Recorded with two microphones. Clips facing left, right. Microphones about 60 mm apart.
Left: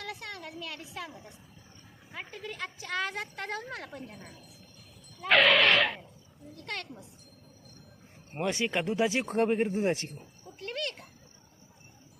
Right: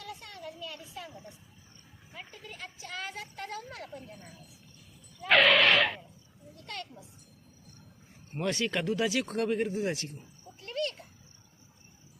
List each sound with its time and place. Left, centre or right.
0.0 s a sound: left
1.1 s speech: centre
2.3 s a woman's voice: left
5.3 s speech: centre
6.6 s a child's voice: left
8.4 s speech: centre; by 10.1 s left
10.6 s a sound: left